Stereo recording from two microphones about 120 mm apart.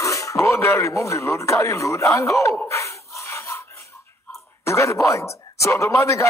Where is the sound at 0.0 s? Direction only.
25° left (ahead or behind).